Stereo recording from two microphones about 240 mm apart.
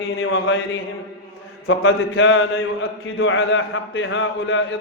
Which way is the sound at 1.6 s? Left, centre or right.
Left.